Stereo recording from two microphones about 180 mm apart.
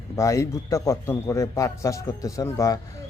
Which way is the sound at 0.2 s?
15° left (ahead or behind).